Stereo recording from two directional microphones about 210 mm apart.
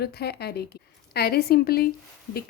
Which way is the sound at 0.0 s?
50° left (ahead or behind).